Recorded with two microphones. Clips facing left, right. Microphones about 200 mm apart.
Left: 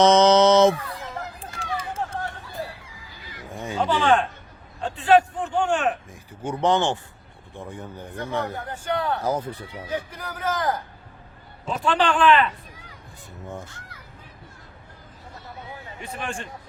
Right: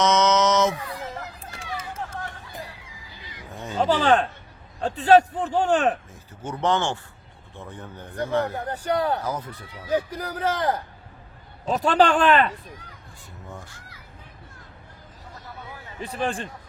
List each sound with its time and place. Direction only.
0.0 s a sound: 30° left (ahead or behind)
1.2 s run: 30° left (ahead or behind)
2.5 s neigh: 20° right (ahead or behind)
3.5 s a sound: 10° left (ahead or behind)
3.8 s a sound: 40° right (ahead or behind)
4.8 s speech: 40° right (ahead or behind)
6.4 s speech: 15° left (ahead or behind)
8.5 s speech: 40° right (ahead or behind)
9.2 s speech: 30° left (ahead or behind)
9.9 s speech: 35° right (ahead or behind)
13.5 s speech: 20° left (ahead or behind)
16.0 s speech: 35° right (ahead or behind)